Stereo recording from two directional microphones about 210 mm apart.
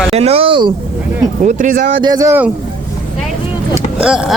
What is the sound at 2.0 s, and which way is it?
Speech, 20° right (ahead or behind).